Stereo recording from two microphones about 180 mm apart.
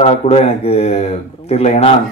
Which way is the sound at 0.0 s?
35° left (ahead or behind).